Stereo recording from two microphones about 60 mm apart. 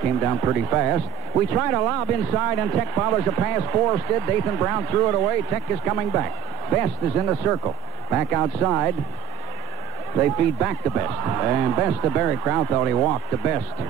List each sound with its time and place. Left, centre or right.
0.0 s radio: centre
0.3 s speech: centre
2.9 s speech: centre
3.2 s speech: centre
7.6 s speech: right
10.1 s speech: centre